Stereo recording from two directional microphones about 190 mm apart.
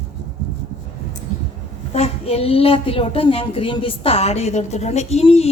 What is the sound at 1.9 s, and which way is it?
A woman's voice, 35° left (ahead or behind).